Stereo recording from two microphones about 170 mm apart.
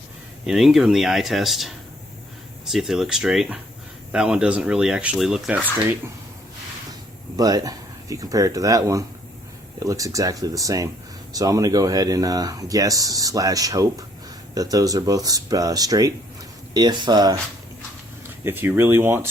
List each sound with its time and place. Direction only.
0.4 s speech: centre (ahead or behind)
7.3 s speech: 20° right (ahead or behind)
18.4 s speech: 10° right (ahead or behind)